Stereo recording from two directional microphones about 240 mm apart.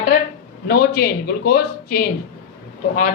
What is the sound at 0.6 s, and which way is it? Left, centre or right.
Speech, left.